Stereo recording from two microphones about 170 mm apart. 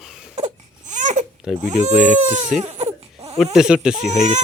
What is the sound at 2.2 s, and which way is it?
Speech, 40° right (ahead or behind).